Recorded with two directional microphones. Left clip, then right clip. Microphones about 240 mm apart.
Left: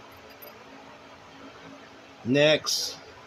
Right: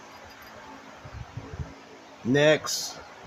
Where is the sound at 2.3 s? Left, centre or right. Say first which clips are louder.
Even; right.